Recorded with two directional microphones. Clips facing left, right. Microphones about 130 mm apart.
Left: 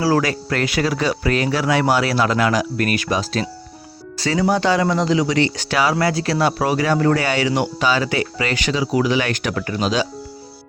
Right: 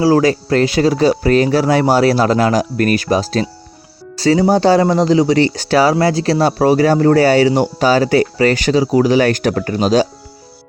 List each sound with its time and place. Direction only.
0.0 s speech: 25° right (ahead or behind)